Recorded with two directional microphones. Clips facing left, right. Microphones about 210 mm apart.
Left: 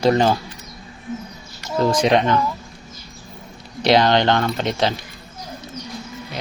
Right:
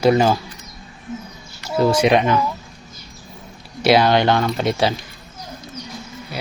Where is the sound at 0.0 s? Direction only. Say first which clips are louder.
Right 1 dB; 10° right (ahead or behind).